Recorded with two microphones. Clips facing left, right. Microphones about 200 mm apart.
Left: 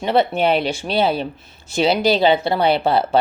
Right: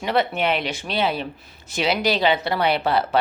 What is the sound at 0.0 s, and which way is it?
Speech, 30° left (ahead or behind).